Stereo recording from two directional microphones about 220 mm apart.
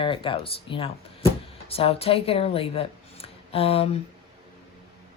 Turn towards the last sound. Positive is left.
turn(degrees=25)  # may be behind; listen again after turning